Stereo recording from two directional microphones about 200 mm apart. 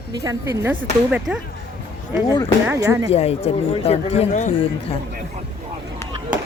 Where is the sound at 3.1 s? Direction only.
30° left (ahead or behind).